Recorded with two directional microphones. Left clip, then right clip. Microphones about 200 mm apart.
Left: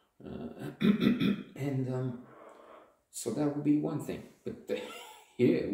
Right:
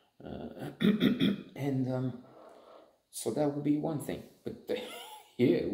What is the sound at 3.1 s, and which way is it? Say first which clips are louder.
Speech: right 2 dB; 25° right (ahead or behind).